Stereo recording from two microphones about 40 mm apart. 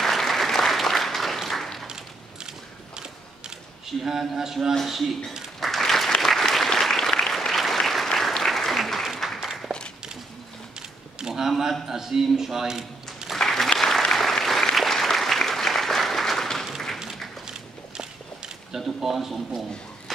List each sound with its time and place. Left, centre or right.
0.0 s applause: centre
3.0 s mechanisms: centre
4.8 s a man's voice: centre
5.6 s applause: centre
9.7 s walk: right
11.1 s a sound: centre
11.4 s a man's voice: centre
13.4 s applause: centre
17.5 s walk: centre
18.9 s a man's voice: centre